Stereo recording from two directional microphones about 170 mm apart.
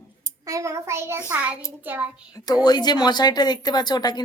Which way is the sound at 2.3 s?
20° left (ahead or behind).